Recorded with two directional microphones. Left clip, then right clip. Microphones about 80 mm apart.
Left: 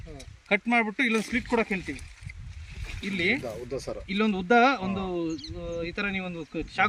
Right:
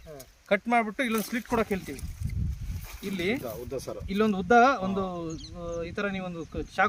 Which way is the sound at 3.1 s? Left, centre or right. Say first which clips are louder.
Left 4 dB; right.